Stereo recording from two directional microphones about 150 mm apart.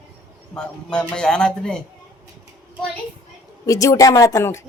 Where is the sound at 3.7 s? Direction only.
20° left (ahead or behind).